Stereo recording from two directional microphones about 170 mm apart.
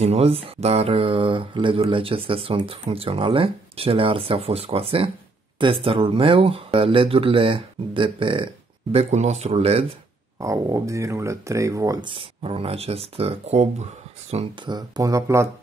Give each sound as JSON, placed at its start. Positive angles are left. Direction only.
{"t": 0.0, "sound": "speech", "side_deg": -35}
{"t": 8.9, "sound": "speech", "side_deg": -40}
{"t": 10.4, "sound": "speech", "side_deg": -20}